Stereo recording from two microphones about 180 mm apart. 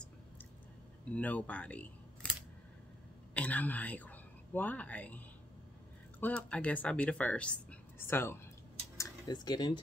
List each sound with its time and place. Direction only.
1.1 s speech: 10° left (ahead or behind)
3.3 s speech: 10° left (ahead or behind)
8.9 s a sound: 20° left (ahead or behind)